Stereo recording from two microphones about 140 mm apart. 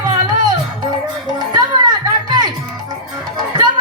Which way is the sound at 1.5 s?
30° right (ahead or behind).